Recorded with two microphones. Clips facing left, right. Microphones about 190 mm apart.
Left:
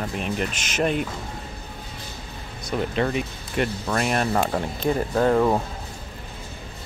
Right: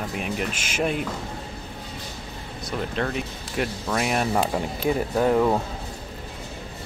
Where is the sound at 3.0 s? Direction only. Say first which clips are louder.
Left 3 dB; 5° left (ahead or behind); by 5.4 s 10° right (ahead or behind).